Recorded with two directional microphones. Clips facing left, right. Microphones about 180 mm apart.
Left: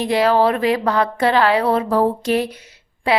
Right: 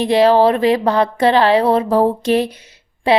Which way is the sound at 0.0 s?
30° right (ahead or behind).